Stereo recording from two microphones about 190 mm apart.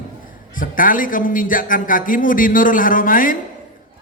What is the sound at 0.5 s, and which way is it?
A man's voice, 45° left (ahead or behind).